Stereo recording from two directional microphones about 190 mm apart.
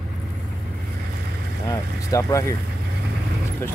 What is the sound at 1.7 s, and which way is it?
Speech, 15° left (ahead or behind).